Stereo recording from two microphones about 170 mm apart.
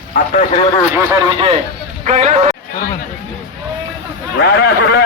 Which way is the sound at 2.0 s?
40° right (ahead or behind).